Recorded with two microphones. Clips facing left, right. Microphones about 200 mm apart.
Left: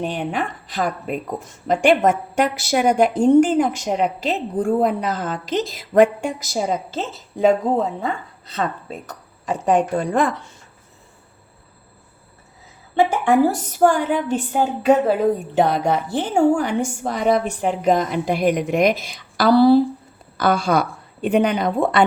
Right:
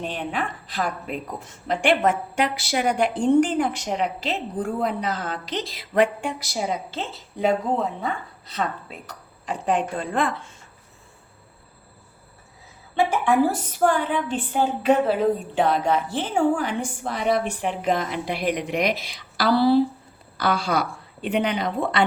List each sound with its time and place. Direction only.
0.0 s speech: 45° left (ahead or behind)
9.5 s a woman's voice: 45° left (ahead or behind)
13.7 s speech: 45° left (ahead or behind)